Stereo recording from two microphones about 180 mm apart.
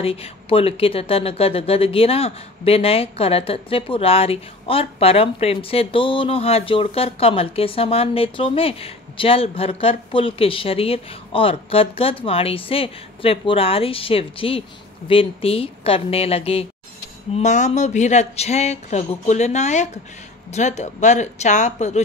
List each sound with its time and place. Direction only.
0.0 s speech: 35° left (ahead or behind)